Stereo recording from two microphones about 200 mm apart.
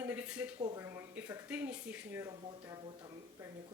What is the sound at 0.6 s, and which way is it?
Speech, 15° right (ahead or behind).